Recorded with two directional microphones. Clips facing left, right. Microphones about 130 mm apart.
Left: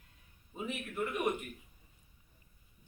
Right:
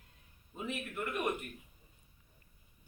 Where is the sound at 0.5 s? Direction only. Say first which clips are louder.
Left 2 dB; 10° left (ahead or behind).